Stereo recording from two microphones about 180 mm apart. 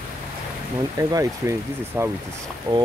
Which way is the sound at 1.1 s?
15° right (ahead or behind).